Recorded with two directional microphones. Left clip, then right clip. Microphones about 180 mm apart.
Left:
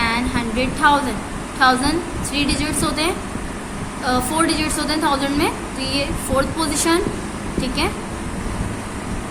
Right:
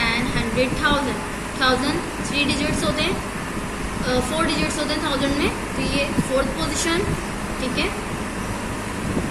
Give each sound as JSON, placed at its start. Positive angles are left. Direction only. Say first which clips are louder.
{"t": 0.0, "sound": "a sound", "louder": "left 2 dB", "side_deg": 65}
{"t": 1.6, "sound": "a woman's voice", "louder": "left 4 dB", "side_deg": 65}
{"t": 6.6, "sound": "speech", "louder": "left 4 dB", "side_deg": 65}